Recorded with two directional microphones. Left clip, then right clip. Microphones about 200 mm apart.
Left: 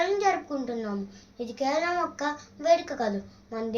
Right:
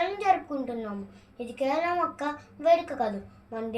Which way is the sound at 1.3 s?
20° left (ahead or behind).